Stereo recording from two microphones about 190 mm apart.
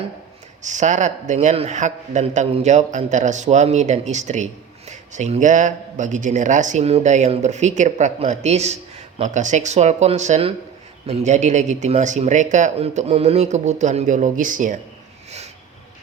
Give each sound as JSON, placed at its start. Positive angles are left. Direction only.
{"t": 0.6, "sound": "speech", "side_deg": -40}